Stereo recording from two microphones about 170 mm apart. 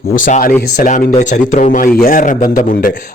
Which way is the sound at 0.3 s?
50° left (ahead or behind).